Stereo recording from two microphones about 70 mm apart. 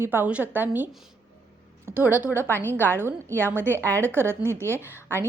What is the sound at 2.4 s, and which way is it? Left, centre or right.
Speech, left.